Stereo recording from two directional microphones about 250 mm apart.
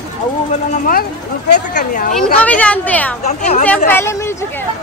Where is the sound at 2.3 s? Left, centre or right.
Centre.